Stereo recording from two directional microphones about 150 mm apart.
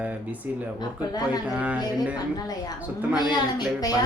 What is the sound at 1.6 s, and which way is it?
Speech, 10° right (ahead or behind).